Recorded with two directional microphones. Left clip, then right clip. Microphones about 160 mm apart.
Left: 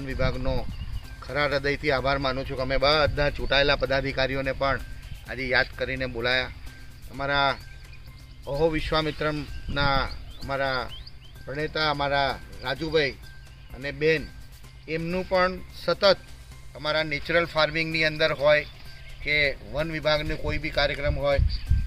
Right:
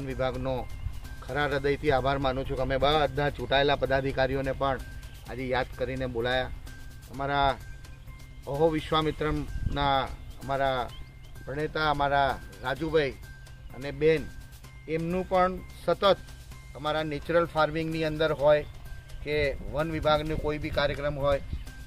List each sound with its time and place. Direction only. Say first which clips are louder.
0.0 s speech: left 1 dB; centre (ahead or behind)
1.3 s speech: left 2 dB; 15° right (ahead or behind)
4.1 s speech: left 1 dB; 20° right (ahead or behind)
5.3 s speech: left 6 dB; 70° right (ahead or behind); by 6.1 s 50° right (ahead or behind)
6.1 s speech: left 3 dB; 30° right (ahead or behind)
7.2 s speech: left 2 dB; 10° right (ahead or behind)
11.4 s speech: left 2 dB; 15° left (ahead or behind)
13.7 s speech: left 1 dB; 5° left (ahead or behind)
16.8 s speech: left 4 dB; 20° right (ahead or behind)
17.9 s speech: left 4 dB; 40° right (ahead or behind)
19.2 s speech: left 5 dB; 20° right (ahead or behind)
19.8 s speech: left 1 dB; 5° right (ahead or behind); by 21.1 s 15° left (ahead or behind)